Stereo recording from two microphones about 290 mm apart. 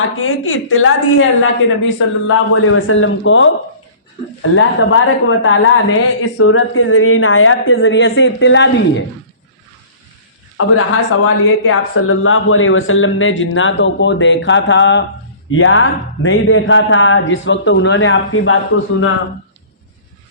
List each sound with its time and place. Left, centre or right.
0.2 s a woman's voice: left
4.5 s a woman's voice: left
10.6 s a woman's voice: left